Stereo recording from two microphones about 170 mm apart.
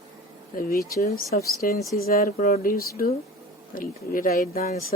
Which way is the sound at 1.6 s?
60° left (ahead or behind).